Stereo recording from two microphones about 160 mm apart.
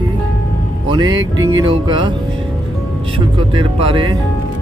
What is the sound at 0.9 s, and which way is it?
Music, 25° right (ahead or behind).